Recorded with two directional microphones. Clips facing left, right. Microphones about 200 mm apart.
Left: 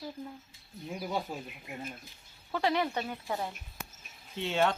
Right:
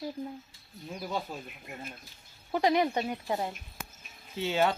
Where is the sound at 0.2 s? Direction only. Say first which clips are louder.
Right 5 dB; 45° right (ahead or behind).